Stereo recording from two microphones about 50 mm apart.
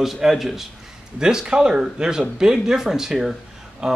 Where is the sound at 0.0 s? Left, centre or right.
Centre.